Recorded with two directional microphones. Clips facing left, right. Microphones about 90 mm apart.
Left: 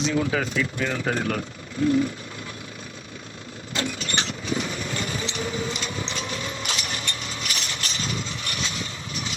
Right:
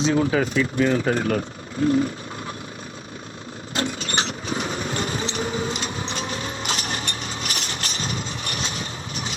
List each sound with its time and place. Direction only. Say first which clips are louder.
0.0 s speech: right 4 dB; 35° right (ahead or behind)
3.8 s vehicle: right 3 dB; 40° right (ahead or behind)